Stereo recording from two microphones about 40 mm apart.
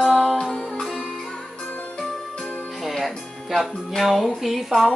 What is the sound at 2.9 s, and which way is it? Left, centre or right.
Music, centre.